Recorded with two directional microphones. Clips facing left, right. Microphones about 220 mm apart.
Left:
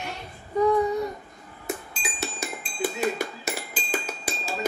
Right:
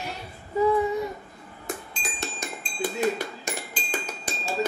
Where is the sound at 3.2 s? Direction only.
10° left (ahead or behind).